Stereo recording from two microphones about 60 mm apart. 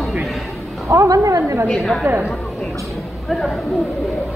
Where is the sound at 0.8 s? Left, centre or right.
Right.